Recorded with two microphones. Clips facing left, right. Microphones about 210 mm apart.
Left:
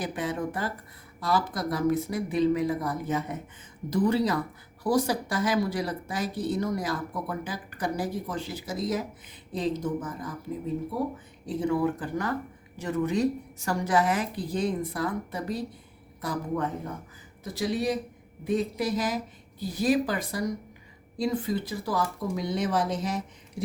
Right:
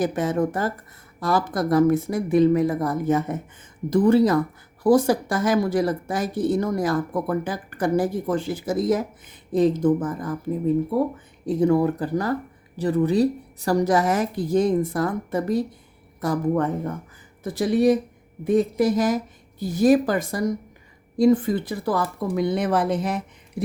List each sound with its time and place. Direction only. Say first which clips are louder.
0.0 s speech: right 8 dB; 45° right (ahead or behind)
11.4 s speech: right 7 dB; 45° right (ahead or behind)